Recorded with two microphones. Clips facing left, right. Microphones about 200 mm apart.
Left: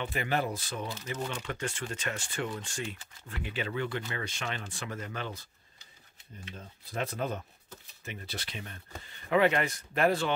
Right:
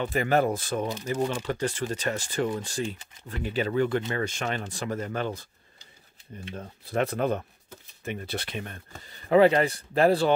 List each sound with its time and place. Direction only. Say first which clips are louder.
0.0 s speech: right 8 dB; 45° right (ahead or behind)
1.0 s speech: right 8 dB; 35° right (ahead or behind)
6.5 s speech: right 9 dB; 65° right (ahead or behind)
9.1 s speech: right 7 dB; 35° right (ahead or behind)